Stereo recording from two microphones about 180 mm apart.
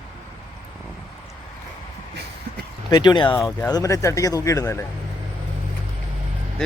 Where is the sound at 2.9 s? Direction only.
25° left (ahead or behind).